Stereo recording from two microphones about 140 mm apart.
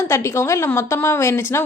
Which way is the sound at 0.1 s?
20° left (ahead or behind).